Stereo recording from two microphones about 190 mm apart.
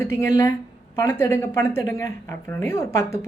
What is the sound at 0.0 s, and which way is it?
A woman's voice, 15° left (ahead or behind).